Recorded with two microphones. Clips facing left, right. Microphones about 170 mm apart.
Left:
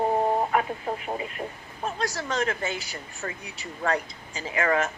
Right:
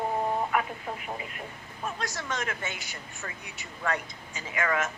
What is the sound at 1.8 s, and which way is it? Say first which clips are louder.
Speech: left 5 dB; 35° left (ahead or behind).